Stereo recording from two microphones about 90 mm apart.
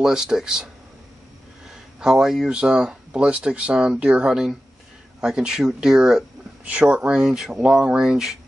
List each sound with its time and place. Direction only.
0.0 s speech: 5° right (ahead or behind)
2.0 s speech: 5° right (ahead or behind)